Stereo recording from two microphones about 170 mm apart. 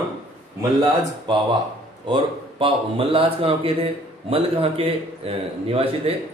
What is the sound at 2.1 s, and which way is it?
A man's voice, 30° right (ahead or behind).